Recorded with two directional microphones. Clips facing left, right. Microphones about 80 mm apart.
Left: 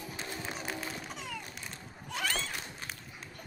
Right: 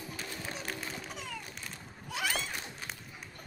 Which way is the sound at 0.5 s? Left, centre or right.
Centre.